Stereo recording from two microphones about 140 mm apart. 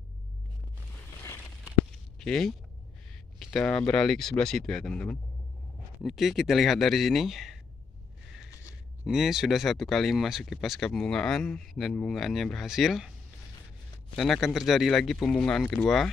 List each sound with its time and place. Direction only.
2.1 s speech: 5° left (ahead or behind)
9.0 s speech: centre (ahead or behind)
14.1 s speech: centre (ahead or behind)